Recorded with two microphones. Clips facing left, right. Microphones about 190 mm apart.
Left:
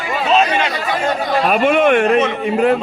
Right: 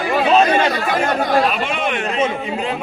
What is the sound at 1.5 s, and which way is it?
Speech, 50° left (ahead or behind).